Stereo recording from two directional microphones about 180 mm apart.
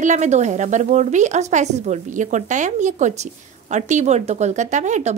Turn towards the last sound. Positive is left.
turn(degrees=-40)  # may be behind; listen again after turning